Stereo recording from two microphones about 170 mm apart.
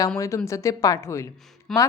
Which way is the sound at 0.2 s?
20° left (ahead or behind).